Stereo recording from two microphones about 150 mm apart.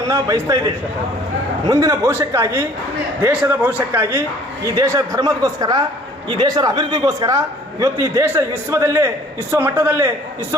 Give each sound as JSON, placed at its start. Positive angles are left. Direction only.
{"t": 0.1, "sound": "a man's voice", "side_deg": -25}
{"t": 1.7, "sound": "a man's voice", "side_deg": -20}
{"t": 4.6, "sound": "a man's voice", "side_deg": -25}